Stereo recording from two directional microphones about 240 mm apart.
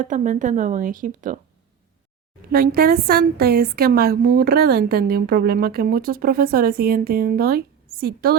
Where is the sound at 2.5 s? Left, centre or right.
Right.